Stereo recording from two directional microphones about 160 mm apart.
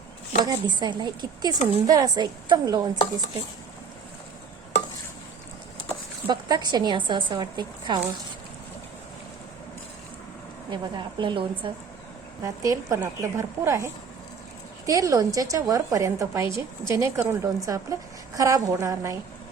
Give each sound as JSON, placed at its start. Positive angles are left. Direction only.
{"t": 0.4, "sound": "a woman's voice", "side_deg": -25}
{"t": 6.2, "sound": "a woman's voice", "side_deg": -25}
{"t": 10.7, "sound": "a woman's voice", "side_deg": -30}
{"t": 12.4, "sound": "a woman's voice", "side_deg": -20}